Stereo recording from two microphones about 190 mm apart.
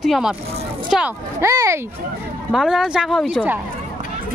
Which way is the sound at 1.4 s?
15° right (ahead or behind).